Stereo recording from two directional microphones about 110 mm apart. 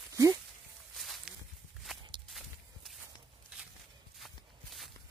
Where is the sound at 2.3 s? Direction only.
Centre (ahead or behind).